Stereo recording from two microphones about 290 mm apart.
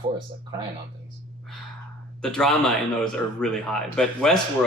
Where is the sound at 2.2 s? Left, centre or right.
Centre.